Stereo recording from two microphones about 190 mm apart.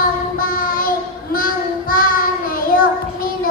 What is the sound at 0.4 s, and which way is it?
Child singing, 50° left (ahead or behind).